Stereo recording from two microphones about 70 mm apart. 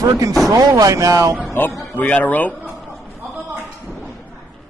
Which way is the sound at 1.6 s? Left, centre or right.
Left.